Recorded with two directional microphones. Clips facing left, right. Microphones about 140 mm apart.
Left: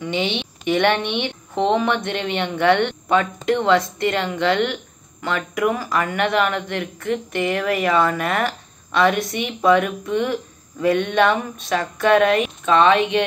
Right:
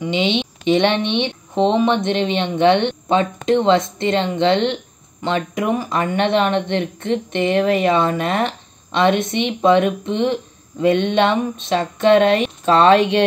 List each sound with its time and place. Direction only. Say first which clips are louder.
0.0 s speech: right 4 dB; 20° right (ahead or behind)